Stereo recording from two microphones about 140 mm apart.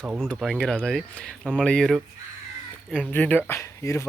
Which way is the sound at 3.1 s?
10° left (ahead or behind).